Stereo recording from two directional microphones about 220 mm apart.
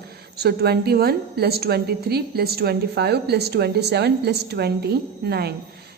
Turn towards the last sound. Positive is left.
turn(degrees=-45)  # may be behind; listen again after turning